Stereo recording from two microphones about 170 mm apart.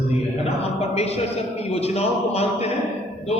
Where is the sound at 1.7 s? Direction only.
35° left (ahead or behind).